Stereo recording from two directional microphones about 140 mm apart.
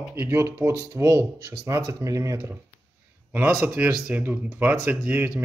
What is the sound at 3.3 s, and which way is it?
Speech, 10° right (ahead or behind).